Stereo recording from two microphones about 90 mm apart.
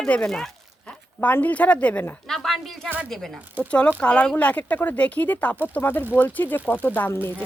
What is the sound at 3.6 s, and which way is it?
Speech, 15° left (ahead or behind).